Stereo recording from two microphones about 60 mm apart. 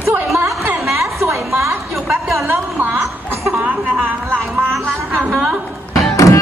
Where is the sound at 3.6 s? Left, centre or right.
Right.